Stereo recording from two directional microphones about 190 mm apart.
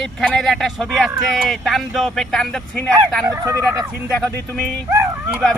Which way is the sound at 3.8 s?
5° right (ahead or behind).